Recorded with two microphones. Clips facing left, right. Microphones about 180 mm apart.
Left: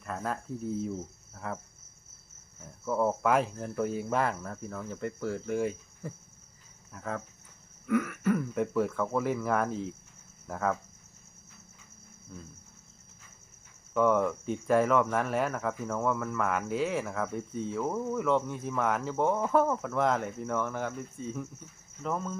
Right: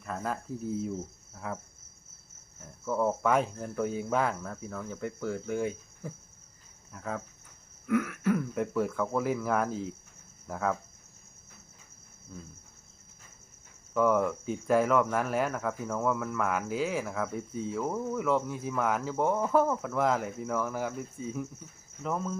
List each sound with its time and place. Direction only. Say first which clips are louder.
0.0 s speech: even; centre (ahead or behind)
2.8 s speech: even; centre (ahead or behind)
12.3 s speech: right 1 dB; centre (ahead or behind)
13.9 s speech: even; centre (ahead or behind)